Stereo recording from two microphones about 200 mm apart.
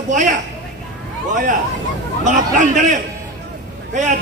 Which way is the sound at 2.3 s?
40° right (ahead or behind).